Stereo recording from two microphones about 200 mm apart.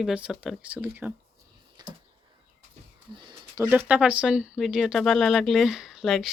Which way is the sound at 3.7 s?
10° right (ahead or behind).